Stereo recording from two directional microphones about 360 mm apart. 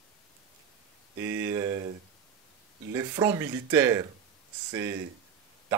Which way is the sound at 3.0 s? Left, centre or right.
Centre.